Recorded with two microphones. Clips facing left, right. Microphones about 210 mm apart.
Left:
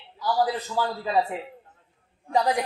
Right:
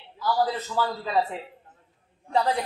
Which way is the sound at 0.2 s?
15° left (ahead or behind).